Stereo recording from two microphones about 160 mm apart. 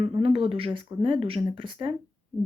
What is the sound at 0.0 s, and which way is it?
Speech, 35° right (ahead or behind).